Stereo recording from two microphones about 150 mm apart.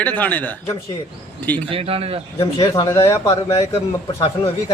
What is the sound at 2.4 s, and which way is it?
Speech, 30° left (ahead or behind).